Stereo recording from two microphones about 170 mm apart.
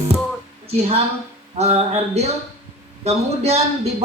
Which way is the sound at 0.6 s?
35° right (ahead or behind).